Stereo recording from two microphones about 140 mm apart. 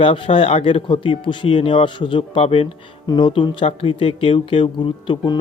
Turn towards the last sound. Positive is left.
turn(degrees=35)  # may be behind; listen again after turning